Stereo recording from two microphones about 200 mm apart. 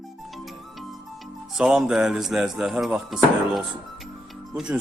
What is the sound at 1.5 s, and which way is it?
Speech, 5° right (ahead or behind).